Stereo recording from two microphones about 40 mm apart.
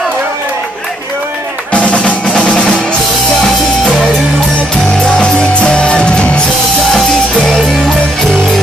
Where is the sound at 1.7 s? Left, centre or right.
Left.